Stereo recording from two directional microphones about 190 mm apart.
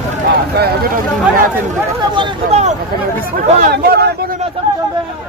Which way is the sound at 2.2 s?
35° right (ahead or behind).